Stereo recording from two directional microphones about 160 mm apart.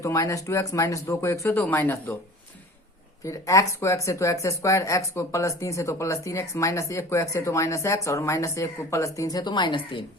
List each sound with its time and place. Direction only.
0.0 s speech: 20° left (ahead or behind)
3.2 s speech: 20° left (ahead or behind)